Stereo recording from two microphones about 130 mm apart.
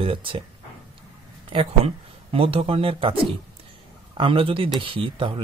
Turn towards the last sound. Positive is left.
turn(degrees=-40)  # may be behind; listen again after turning